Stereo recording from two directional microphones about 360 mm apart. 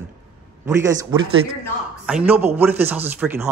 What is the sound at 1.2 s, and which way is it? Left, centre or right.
Speech, right.